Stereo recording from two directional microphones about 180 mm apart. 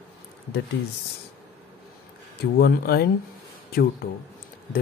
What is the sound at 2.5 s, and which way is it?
Speech, 60° left (ahead or behind).